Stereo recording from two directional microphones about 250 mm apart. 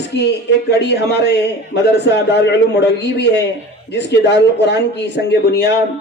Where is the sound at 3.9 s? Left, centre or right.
Left.